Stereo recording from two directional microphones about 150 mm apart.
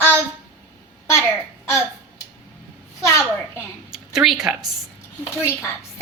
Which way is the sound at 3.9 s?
Centre (ahead or behind).